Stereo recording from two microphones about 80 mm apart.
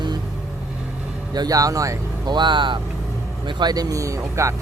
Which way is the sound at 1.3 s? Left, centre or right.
Right.